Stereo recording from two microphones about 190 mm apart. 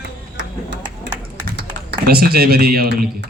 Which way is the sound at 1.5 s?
60° right (ahead or behind).